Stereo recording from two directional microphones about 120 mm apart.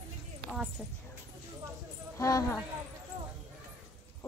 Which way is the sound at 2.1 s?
30° left (ahead or behind).